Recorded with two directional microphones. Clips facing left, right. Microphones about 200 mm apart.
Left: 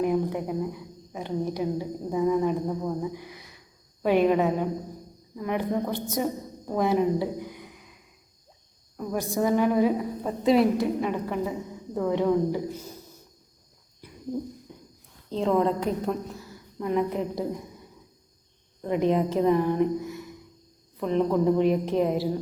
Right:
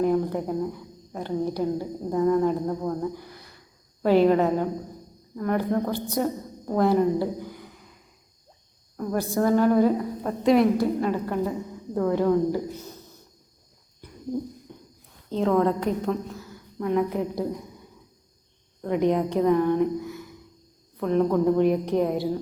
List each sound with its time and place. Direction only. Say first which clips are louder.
0.1 s a woman's voice: right 2 dB; 5° left (ahead or behind)
9.0 s a woman's voice: right 2 dB; centre (ahead or behind)
15.3 s a woman's voice: right 2 dB; centre (ahead or behind)
18.8 s a woman's voice: right 1 dB; centre (ahead or behind)